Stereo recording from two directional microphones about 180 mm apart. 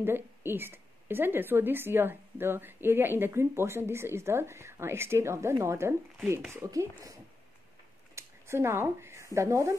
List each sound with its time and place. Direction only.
0.0 s speech: 10° right (ahead or behind)